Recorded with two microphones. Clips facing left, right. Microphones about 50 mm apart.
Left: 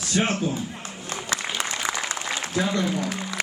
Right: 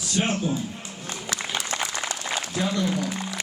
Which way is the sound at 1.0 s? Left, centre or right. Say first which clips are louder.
Left 2 dB; left.